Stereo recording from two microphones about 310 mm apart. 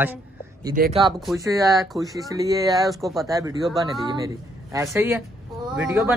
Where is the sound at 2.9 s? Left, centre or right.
Centre.